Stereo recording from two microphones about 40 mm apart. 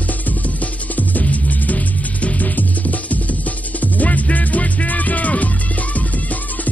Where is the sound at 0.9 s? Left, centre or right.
Left.